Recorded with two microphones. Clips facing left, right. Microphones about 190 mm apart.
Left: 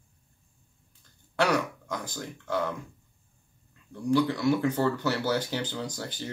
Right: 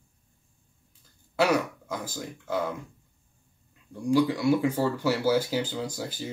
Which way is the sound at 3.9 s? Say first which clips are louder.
Right 2 dB; 10° right (ahead or behind).